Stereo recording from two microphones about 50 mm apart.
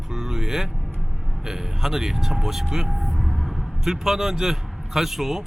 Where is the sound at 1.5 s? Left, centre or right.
Centre.